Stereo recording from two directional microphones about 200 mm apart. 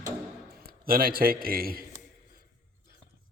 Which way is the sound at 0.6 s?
45° right (ahead or behind).